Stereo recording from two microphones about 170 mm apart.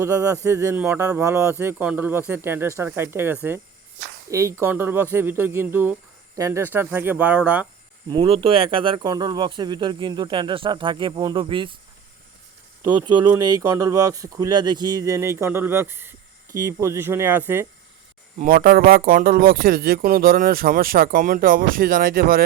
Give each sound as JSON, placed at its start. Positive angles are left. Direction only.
{"t": 0.0, "sound": "speech", "side_deg": -20}
{"t": 8.0, "sound": "speech", "side_deg": -30}
{"t": 12.8, "sound": "speech", "side_deg": -25}
{"t": 18.3, "sound": "speech", "side_deg": -55}